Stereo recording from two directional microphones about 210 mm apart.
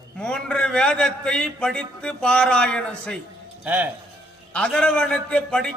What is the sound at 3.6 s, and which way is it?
Speech, 10° right (ahead or behind).